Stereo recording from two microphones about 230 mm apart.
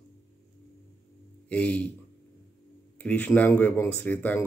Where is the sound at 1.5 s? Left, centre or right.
Centre.